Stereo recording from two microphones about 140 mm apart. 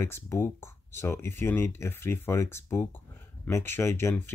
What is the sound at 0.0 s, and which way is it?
Speech, 20° left (ahead or behind).